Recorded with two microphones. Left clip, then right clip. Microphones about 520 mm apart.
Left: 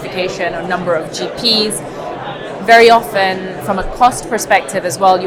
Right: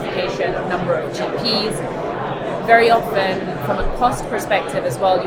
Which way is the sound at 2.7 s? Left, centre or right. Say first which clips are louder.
Left 6 dB; left.